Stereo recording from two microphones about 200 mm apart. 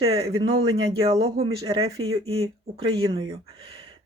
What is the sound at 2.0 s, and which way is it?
Speech, 90° right.